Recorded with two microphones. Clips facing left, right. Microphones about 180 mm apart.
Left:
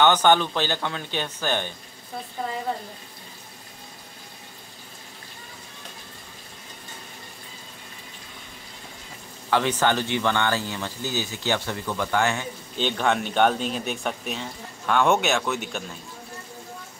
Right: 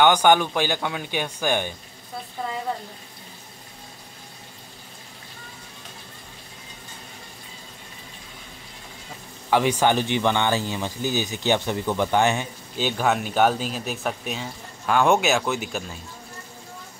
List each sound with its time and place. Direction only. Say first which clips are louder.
0.0 s speech: right 1 dB; 10° right (ahead or behind)
9.5 s speech: right 2 dB; 15° right (ahead or behind)
12.7 s speech: right 1 dB; 5° right (ahead or behind)